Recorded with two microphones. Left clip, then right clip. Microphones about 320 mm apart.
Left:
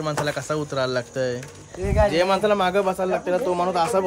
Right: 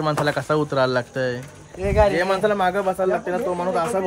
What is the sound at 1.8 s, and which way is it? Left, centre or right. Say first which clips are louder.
Speech: right 3 dB; right.